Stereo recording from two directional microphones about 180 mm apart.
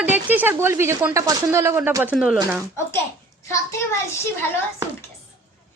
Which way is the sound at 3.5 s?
15° left (ahead or behind).